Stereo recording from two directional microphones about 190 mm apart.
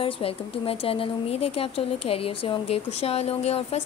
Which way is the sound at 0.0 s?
30° left (ahead or behind).